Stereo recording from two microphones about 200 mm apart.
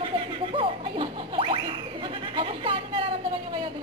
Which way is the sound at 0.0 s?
25° right (ahead or behind).